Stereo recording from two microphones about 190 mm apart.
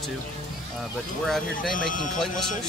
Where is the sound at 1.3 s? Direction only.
5° left (ahead or behind).